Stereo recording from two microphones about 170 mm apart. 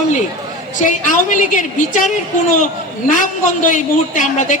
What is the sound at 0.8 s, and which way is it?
A woman's voice, 50° left (ahead or behind).